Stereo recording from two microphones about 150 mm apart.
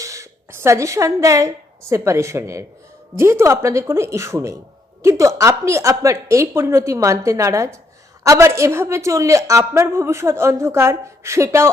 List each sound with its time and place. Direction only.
0.0 s a woman's voice: 20° right (ahead or behind)